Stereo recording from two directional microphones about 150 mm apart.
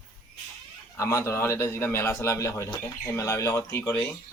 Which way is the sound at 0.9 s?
20° left (ahead or behind).